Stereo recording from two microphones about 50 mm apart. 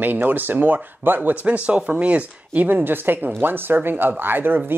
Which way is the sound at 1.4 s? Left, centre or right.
Right.